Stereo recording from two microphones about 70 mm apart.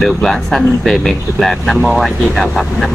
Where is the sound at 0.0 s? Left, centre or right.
Centre.